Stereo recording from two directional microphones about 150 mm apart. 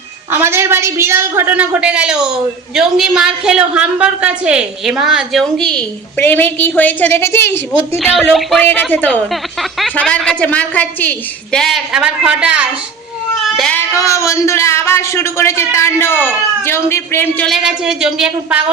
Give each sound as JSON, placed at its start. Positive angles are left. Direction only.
{"t": 0.3, "sound": "a woman's voice", "side_deg": -15}
{"t": 7.7, "sound": "a woman's voice", "side_deg": -5}
{"t": 8.6, "sound": "a man's voice", "side_deg": 10}
{"t": 9.3, "sound": "a woman's voice", "side_deg": 0}
{"t": 13.4, "sound": "cat", "side_deg": 0}
{"t": 13.7, "sound": "a man's voice", "side_deg": 20}
{"t": 17.4, "sound": "a woman's voice", "side_deg": 0}